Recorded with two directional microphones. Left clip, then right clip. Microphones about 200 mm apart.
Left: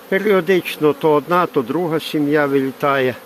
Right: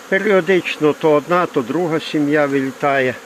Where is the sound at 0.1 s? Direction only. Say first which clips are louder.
Right 1 dB; centre (ahead or behind).